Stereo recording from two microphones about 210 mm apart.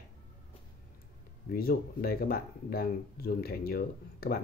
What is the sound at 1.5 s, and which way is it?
Speech, 45° left (ahead or behind).